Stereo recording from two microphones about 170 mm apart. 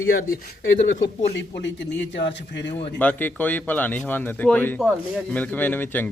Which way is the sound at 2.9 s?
10° left (ahead or behind).